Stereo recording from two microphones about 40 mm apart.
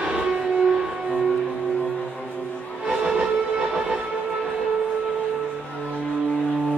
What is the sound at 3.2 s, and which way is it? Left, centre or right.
Train, right.